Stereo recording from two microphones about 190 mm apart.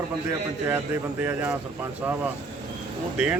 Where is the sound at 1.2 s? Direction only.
10° right (ahead or behind).